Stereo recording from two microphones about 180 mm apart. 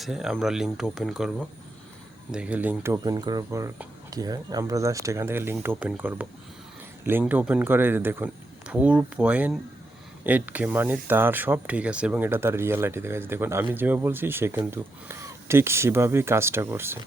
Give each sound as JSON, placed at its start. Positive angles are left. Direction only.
{"t": 0.0, "sound": "speech", "side_deg": 0}